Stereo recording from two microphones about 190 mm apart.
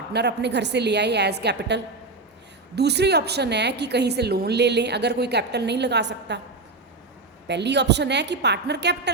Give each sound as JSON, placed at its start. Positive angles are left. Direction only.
{"t": 0.1, "sound": "a woman's voice", "side_deg": -60}
{"t": 7.4, "sound": "a woman's voice", "side_deg": -65}